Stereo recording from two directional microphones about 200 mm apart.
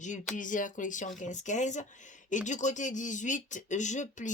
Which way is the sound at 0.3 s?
40° left (ahead or behind).